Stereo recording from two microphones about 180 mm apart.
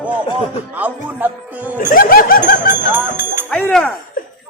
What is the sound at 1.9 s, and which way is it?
Laughter, 55° left (ahead or behind).